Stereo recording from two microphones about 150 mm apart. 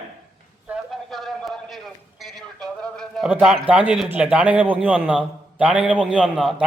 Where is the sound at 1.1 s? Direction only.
Centre (ahead or behind).